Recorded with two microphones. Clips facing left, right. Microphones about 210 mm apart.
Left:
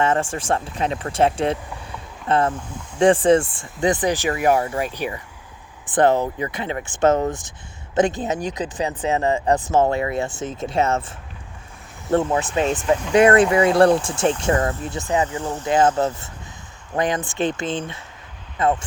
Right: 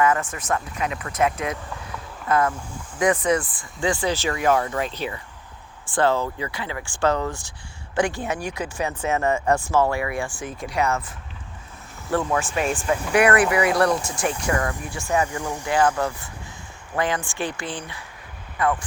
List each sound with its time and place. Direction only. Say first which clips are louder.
0.0 s speech: left 1 dB; 30° left (ahead or behind)
12.1 s speech: left 4 dB; 20° left (ahead or behind)
15.3 s speech: left 2 dB; 10° right (ahead or behind)
15.6 s speech: left 3 dB; 20° left (ahead or behind)